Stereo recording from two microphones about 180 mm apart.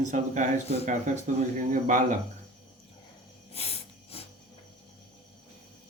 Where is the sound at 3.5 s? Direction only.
35° left (ahead or behind).